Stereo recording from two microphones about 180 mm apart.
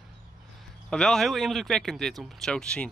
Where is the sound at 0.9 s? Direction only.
Centre (ahead or behind).